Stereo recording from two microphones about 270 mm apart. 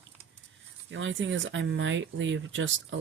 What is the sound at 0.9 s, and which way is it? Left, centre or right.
Speech, right.